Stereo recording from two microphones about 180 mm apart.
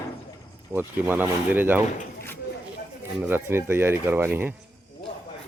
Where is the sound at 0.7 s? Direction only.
10° right (ahead or behind).